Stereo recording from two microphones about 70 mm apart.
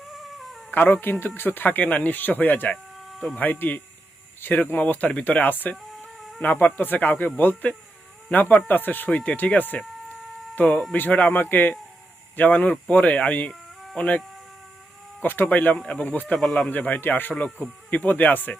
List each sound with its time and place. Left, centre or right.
0.0 s cat: centre
0.7 s speech: left
3.0 s a sound: centre
3.3 s speech: left
6.1 s chicken: centre
6.4 s speech: left
15.2 s speech: left; by 16.6 s centre
16.6 s speech: left